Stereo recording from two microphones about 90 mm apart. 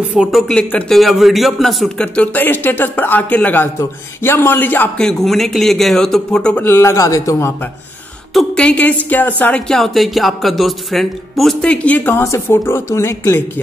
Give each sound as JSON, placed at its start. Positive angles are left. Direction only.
{"t": 0.3, "sound": "speech", "side_deg": 0}
{"t": 0.6, "sound": "a woman's voice", "side_deg": 15}
{"t": 0.9, "sound": "speech", "side_deg": 0}
{"t": 2.1, "sound": "speech", "side_deg": 20}
{"t": 4.9, "sound": "speech", "side_deg": 5}
{"t": 6.6, "sound": "a man's voice", "side_deg": 25}
{"t": 8.3, "sound": "a woman's voice", "side_deg": 5}
{"t": 9.7, "sound": "speech", "side_deg": 5}
{"t": 12.2, "sound": "speech", "side_deg": 30}